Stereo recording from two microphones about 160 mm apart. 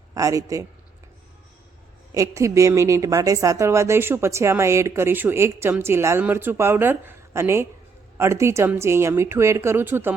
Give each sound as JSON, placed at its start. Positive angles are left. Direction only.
{"t": 0.1, "sound": "a man's voice", "side_deg": -20}
{"t": 2.1, "sound": "a woman's voice", "side_deg": -20}